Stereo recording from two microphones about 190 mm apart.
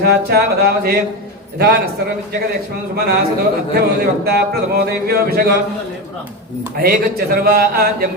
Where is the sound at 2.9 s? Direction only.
55° right (ahead or behind).